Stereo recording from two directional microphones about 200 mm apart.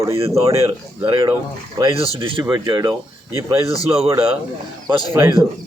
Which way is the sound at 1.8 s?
25° right (ahead or behind).